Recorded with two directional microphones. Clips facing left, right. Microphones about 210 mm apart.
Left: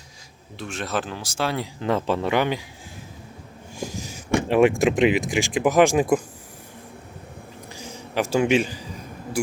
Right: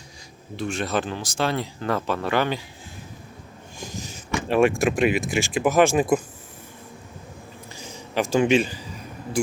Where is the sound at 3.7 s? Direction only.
10° left (ahead or behind).